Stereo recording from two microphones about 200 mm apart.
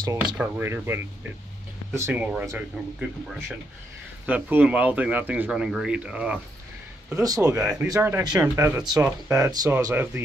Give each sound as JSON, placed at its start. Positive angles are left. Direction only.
{"t": 0.4, "sound": "speech", "side_deg": -10}
{"t": 7.1, "sound": "speech", "side_deg": -15}
{"t": 7.4, "sound": "speech", "side_deg": -5}
{"t": 7.9, "sound": "speech", "side_deg": -15}